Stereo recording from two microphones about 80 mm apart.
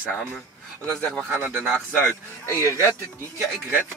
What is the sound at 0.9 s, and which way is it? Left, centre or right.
Speech, centre.